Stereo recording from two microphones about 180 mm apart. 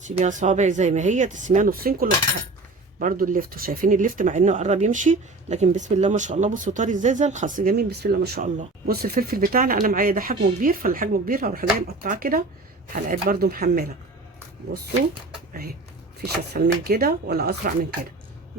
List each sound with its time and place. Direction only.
0.2 s speech: 45° right (ahead or behind)
16.2 s speech: 60° right (ahead or behind)